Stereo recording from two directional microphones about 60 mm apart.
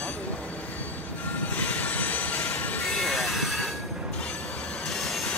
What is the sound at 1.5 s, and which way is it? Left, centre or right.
Train, left.